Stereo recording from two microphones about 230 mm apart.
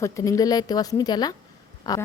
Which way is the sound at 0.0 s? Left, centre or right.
Centre.